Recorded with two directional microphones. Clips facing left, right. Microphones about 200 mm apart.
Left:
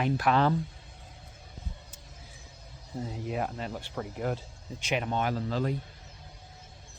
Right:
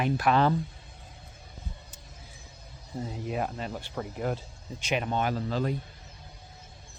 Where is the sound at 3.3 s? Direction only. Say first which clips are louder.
Right 1 dB; 25° right (ahead or behind).